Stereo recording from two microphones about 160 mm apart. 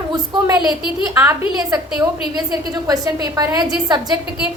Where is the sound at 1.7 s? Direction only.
25° right (ahead or behind).